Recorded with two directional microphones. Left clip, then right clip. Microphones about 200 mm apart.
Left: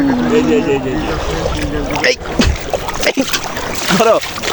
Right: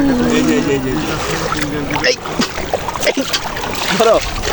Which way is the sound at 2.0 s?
20° left (ahead or behind).